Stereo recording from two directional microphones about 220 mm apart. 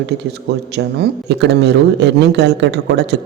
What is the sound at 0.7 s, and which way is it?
Speech, 50° right (ahead or behind).